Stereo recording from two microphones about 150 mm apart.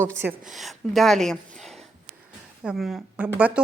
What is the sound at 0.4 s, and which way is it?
Speech, centre (ahead or behind).